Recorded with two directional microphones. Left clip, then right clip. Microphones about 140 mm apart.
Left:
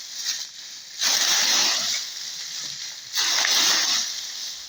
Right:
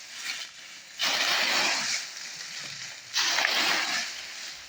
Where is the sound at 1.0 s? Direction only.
35° left (ahead or behind).